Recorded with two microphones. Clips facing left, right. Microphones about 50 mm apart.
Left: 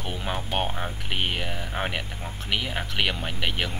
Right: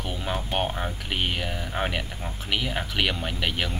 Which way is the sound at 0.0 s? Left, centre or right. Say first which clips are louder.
Right 1 dB; centre.